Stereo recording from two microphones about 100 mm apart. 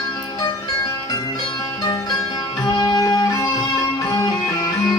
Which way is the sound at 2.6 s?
40° left (ahead or behind).